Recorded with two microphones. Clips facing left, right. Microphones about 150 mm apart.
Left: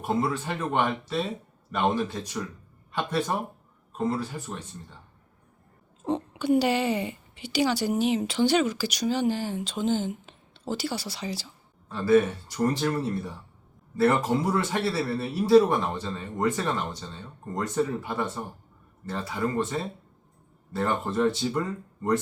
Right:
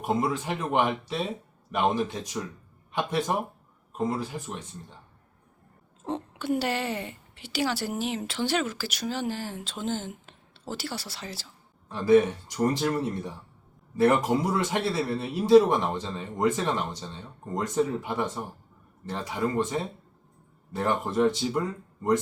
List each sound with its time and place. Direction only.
0.0 s a man's voice: 15° right (ahead or behind)
6.1 s a woman's voice: centre (ahead or behind)
11.9 s a man's voice: 15° right (ahead or behind)